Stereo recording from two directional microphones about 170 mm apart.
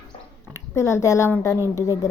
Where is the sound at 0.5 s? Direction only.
15° left (ahead or behind).